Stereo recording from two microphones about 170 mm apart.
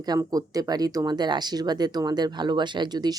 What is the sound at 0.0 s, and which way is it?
Speech, 20° right (ahead or behind).